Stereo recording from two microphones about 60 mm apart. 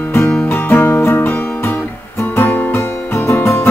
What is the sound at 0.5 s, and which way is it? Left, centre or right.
Music, left.